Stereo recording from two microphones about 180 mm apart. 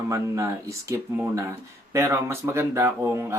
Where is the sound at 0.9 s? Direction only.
10° right (ahead or behind).